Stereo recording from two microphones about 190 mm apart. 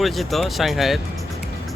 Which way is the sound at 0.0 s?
Centre (ahead or behind).